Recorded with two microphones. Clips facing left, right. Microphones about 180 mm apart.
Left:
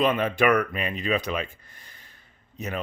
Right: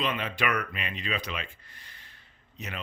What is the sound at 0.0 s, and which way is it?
Speech, 50° left (ahead or behind).